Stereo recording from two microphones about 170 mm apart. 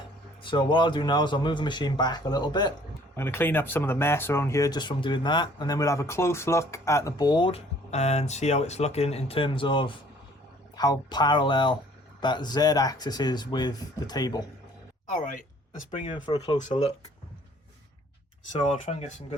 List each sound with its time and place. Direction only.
0.4 s speech: 25° left (ahead or behind)
3.2 s speech: 10° left (ahead or behind)
15.1 s speech: 55° left (ahead or behind)
15.9 s speech: 30° left (ahead or behind)
16.6 s speech: 40° left (ahead or behind)
18.7 s speech: 40° left (ahead or behind)